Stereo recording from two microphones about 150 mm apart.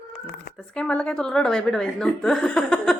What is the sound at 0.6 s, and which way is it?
A woman's voice, 5° left (ahead or behind).